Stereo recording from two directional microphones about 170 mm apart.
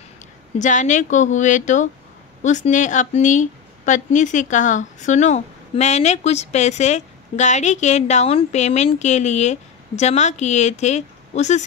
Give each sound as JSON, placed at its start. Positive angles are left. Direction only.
{"t": 0.6, "sound": "speech", "side_deg": 45}